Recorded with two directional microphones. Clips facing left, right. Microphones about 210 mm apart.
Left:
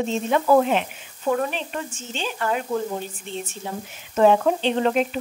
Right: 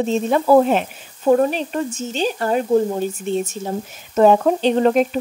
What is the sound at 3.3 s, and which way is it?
Speech, 45° right (ahead or behind).